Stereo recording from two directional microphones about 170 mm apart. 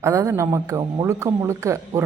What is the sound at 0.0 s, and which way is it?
Speech, 20° right (ahead or behind).